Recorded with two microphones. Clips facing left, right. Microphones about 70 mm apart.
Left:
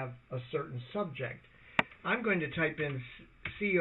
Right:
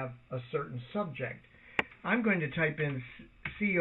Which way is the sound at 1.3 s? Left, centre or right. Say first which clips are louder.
Left 2 dB; centre.